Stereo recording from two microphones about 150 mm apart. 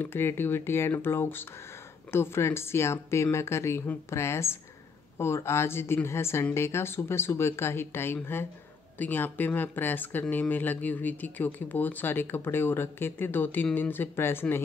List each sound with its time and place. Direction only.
0.0 s speech: 15° left (ahead or behind)